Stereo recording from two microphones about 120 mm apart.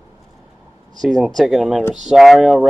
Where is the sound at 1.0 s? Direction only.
Centre (ahead or behind).